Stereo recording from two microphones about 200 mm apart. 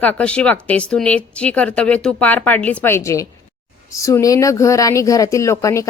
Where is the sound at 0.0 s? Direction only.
5° left (ahead or behind).